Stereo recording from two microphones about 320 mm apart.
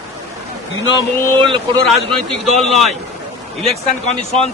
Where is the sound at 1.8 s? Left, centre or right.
Centre.